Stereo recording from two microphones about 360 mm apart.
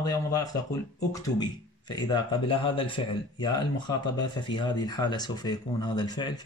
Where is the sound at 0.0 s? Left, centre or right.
Centre.